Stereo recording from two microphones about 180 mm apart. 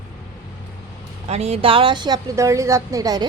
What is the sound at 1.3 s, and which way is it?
A woman's voice, 35° right (ahead or behind).